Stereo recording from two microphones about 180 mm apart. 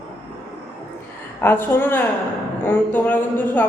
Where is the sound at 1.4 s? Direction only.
10° left (ahead or behind).